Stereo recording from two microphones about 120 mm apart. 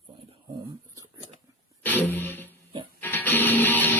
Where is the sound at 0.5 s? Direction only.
30° right (ahead or behind).